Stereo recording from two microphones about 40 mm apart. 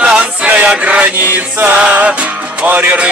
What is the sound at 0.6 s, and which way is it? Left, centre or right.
Mantra, right.